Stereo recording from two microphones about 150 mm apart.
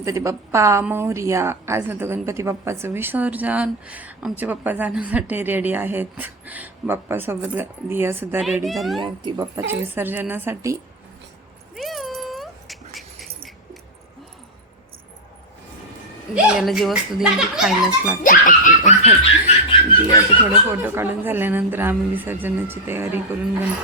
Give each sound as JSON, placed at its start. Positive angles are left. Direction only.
{"t": 0.0, "sound": "a woman's voice", "side_deg": -20}
{"t": 8.6, "sound": "speech", "side_deg": 0}
{"t": 9.0, "sound": "speech", "side_deg": -30}
{"t": 9.9, "sound": "a woman's voice", "side_deg": -15}
{"t": 11.7, "sound": "dog", "side_deg": 0}
{"t": 16.3, "sound": "speech", "side_deg": -5}
{"t": 18.3, "sound": "speech", "side_deg": 60}
{"t": 19.2, "sound": "speech", "side_deg": 40}
{"t": 20.7, "sound": "a woman's voice", "side_deg": -15}